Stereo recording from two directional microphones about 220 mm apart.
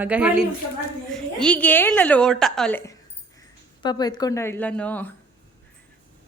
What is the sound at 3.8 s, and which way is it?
A woman's voice, 20° left (ahead or behind).